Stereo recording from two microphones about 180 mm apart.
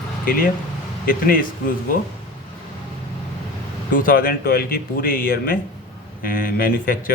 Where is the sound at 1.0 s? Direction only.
50° left (ahead or behind).